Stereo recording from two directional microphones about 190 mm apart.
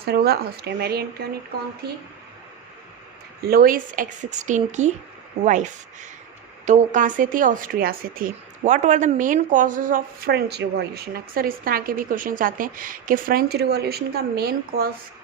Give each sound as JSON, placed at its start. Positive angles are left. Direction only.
{"t": 0.0, "sound": "speech", "side_deg": -55}
{"t": 3.4, "sound": "speech", "side_deg": -50}